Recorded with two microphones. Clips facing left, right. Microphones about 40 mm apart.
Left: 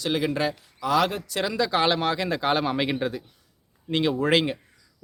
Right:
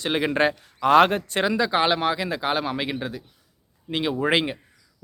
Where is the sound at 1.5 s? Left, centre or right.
Centre.